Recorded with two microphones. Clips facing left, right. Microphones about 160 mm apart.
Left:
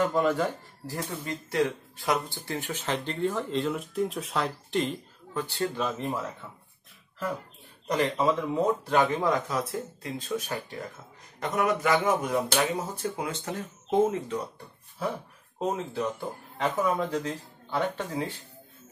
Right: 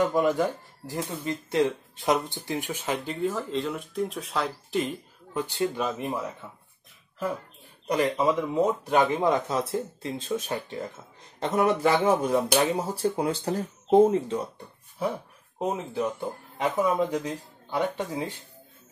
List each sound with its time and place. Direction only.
0.0 s speech: 15° right (ahead or behind)
5.3 s speech: 15° right (ahead or behind)
7.9 s speech: 15° right (ahead or behind); by 14.5 s 30° right (ahead or behind)
15.6 s speech: 15° right (ahead or behind)